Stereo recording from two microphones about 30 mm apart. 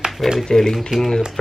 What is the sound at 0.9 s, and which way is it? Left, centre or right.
Speech, right.